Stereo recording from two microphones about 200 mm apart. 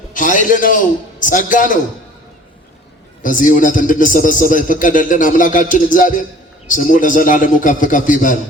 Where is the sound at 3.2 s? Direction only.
40° left (ahead or behind).